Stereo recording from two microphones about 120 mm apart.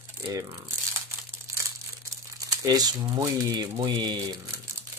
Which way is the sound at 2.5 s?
35° right (ahead or behind).